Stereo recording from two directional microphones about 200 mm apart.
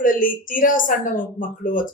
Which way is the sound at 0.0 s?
45° left (ahead or behind).